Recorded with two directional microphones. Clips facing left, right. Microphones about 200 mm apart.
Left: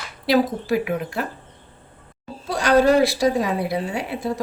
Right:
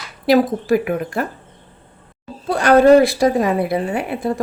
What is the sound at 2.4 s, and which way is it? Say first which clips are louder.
A woman's voice: right 5 dB; 55° right (ahead or behind).